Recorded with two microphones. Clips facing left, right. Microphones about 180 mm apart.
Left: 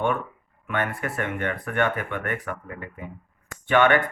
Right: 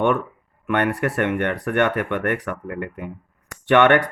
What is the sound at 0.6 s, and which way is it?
Speech, 75° right (ahead or behind).